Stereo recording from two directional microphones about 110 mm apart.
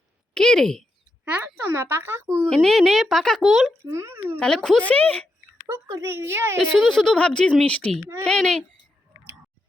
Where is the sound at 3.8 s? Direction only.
25° right (ahead or behind).